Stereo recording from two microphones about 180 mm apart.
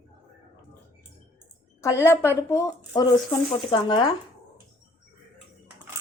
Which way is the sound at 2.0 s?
15° left (ahead or behind).